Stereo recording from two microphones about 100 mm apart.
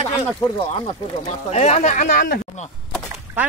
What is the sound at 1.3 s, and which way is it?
Speech, 90° left.